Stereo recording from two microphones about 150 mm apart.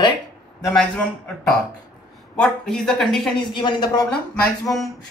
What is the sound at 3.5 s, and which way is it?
Speech, 30° left (ahead or behind).